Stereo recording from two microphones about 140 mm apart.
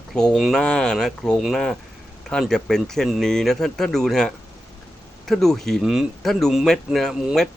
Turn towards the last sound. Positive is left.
turn(degrees=0)  # may be behind; listen again after turning